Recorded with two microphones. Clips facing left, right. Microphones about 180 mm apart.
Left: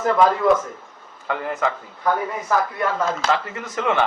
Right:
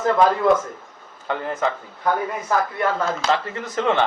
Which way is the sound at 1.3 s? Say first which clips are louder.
Even; 30° right (ahead or behind).